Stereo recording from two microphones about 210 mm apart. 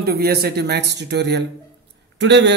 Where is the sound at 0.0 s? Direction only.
45° right (ahead or behind).